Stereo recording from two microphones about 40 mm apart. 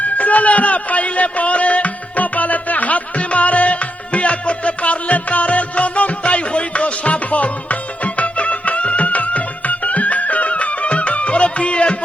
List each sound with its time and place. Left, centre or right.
0.0 s music: left